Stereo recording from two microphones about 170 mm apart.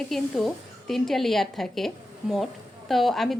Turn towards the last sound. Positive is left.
turn(degrees=0)  # may be behind; listen again after turning